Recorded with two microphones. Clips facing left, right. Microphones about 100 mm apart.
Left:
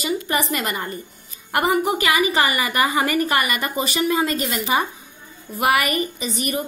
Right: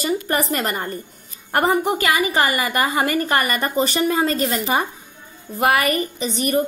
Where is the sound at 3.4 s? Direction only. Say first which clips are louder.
Right 3 dB; 40° right (ahead or behind).